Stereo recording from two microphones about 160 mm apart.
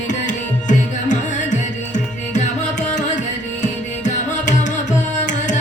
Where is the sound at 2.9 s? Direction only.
50° left (ahead or behind).